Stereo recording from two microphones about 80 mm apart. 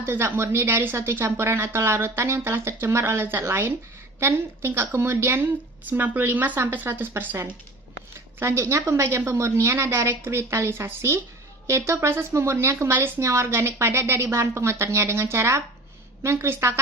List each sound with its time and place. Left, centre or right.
0.0 s speech: right